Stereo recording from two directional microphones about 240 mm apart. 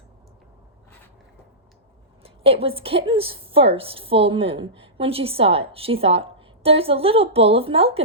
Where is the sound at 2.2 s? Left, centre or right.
Right.